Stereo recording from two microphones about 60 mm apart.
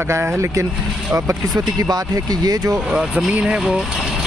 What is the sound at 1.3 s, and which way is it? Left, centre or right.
Speech, right.